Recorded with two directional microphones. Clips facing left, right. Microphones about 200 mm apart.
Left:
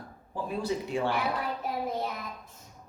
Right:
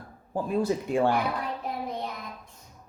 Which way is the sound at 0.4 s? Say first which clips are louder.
Right 4 dB; 50° right (ahead or behind).